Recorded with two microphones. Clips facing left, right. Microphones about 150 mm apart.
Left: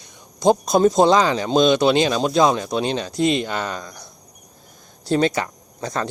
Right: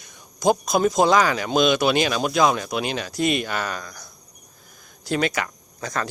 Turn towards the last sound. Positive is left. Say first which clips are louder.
# left 3 dB
turn(degrees=25)  # may be behind; listen again after turning